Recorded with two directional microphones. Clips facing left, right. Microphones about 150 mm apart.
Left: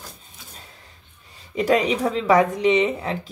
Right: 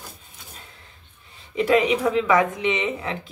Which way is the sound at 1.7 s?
35° left (ahead or behind).